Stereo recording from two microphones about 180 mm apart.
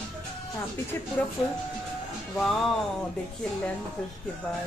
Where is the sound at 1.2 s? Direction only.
10° left (ahead or behind).